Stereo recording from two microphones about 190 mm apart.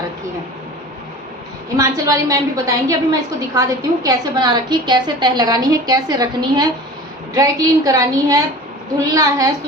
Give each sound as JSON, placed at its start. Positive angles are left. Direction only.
{"t": 1.7, "sound": "a woman's voice", "side_deg": -20}